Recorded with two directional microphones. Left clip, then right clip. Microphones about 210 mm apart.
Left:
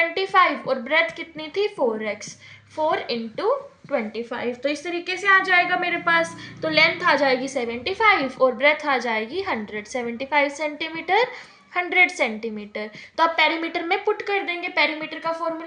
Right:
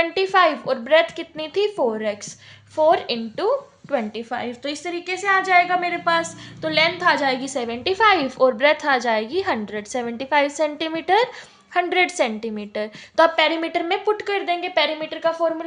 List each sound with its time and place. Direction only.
0.0 s a woman's voice: 40° right (ahead or behind)
2.7 s a woman's voice: 45° right (ahead or behind)